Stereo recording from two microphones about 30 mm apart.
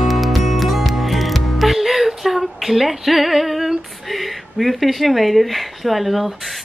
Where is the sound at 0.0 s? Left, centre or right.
Centre.